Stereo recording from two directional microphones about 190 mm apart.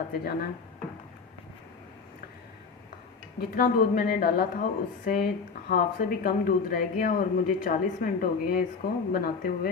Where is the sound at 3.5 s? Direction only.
45° left (ahead or behind).